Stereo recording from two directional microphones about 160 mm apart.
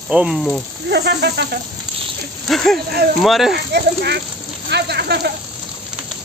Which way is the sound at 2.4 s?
Centre (ahead or behind).